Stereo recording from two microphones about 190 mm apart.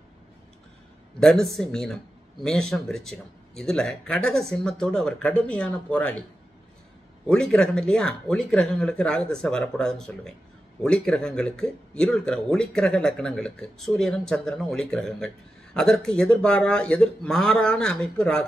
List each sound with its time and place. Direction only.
1.2 s speech: 5° left (ahead or behind)
7.2 s speech: 5° left (ahead or behind)